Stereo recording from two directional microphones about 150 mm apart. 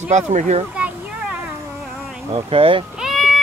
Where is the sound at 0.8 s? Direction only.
10° right (ahead or behind).